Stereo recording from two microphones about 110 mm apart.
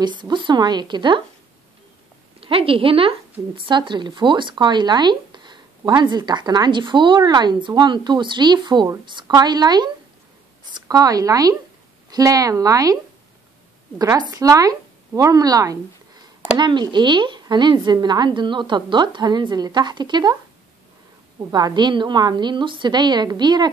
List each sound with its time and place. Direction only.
0.0 s speech: 45° right (ahead or behind)
2.4 s a woman's voice: 55° right (ahead or behind); by 15.8 s 35° right (ahead or behind)
16.5 s speech: 45° right (ahead or behind)
21.5 s a woman's voice: 40° right (ahead or behind)